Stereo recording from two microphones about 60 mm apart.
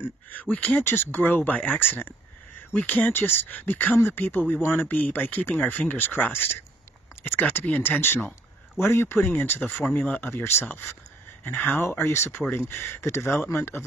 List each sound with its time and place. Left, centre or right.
0.3 s speech: left
3.1 s speech: left
10.3 s speech: left
12.0 s speech: left
12.4 s speech: left